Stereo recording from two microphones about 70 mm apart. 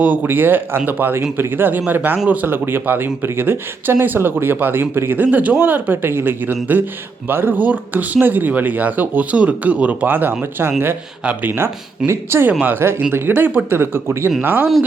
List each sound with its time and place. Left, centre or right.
0.0 s speech: right
12.5 s speech: right